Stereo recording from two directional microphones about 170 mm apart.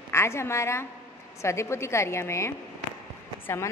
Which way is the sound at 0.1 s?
15° left (ahead or behind).